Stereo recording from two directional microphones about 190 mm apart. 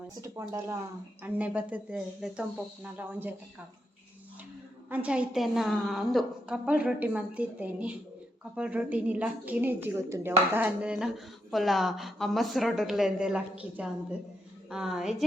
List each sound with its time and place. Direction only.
0.2 s a woman's voice: 15° right (ahead or behind)
4.9 s a woman's voice: 5° right (ahead or behind)